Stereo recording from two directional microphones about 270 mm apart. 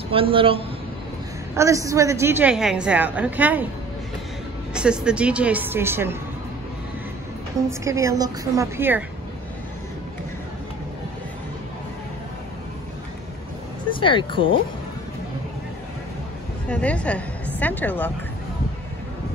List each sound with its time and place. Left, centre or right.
0.1 s a woman's voice: centre
4.7 s a woman's voice: centre
7.8 s a woman's voice: centre
13.8 s speech: centre
16.6 s a woman's voice: centre